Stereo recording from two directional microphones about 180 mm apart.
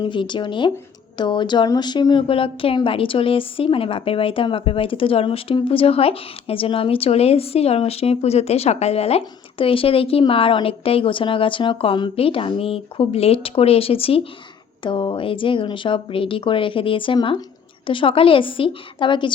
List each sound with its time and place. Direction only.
0.0 s a woman's voice: 25° left (ahead or behind)